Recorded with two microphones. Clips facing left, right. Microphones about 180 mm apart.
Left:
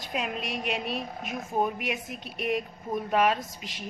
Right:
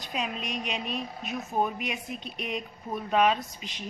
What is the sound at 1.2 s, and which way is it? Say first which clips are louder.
Speech: even; 50° left (ahead or behind).